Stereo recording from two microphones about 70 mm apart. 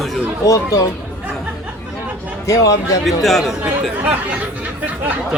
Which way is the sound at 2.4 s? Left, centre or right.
Left.